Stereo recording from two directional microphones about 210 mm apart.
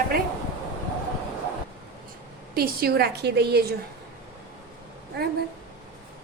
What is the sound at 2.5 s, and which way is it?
A woman's voice, 45° right (ahead or behind).